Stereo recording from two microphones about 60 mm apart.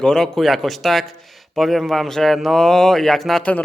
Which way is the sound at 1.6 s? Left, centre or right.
Centre.